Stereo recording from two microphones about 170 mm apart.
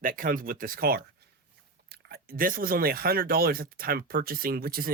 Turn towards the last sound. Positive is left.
turn(degrees=-60)  # may be behind; listen again after turning